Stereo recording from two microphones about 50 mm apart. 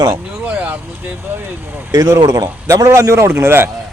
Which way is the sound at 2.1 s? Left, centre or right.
Right.